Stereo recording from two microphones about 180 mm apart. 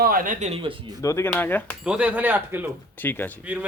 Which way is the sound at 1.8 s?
5° right (ahead or behind).